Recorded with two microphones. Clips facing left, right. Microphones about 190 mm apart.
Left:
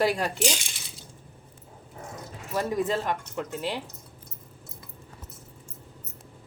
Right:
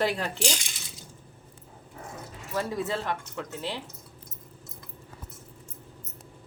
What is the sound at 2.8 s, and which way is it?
Speech, 15° left (ahead or behind).